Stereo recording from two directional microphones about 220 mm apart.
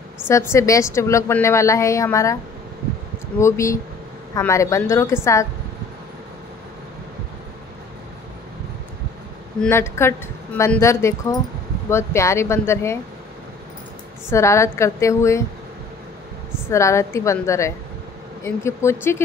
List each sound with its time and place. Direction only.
0.3 s a woman's voice: 10° left (ahead or behind)
3.3 s a woman's voice: 15° left (ahead or behind)
9.6 s a woman's voice: 10° left (ahead or behind)
14.3 s a woman's voice: 15° left (ahead or behind)
16.6 s a woman's voice: 15° left (ahead or behind)